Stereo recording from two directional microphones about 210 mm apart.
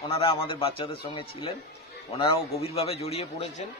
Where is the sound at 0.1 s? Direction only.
25° left (ahead or behind).